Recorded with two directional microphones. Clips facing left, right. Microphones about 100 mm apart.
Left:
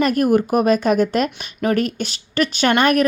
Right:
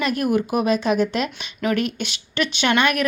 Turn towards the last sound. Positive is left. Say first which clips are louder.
# left 4 dB
turn(degrees=40)  # may be behind; listen again after turning